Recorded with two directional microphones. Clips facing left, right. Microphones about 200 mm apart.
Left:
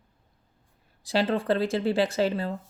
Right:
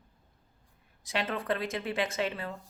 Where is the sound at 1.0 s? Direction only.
35° left (ahead or behind).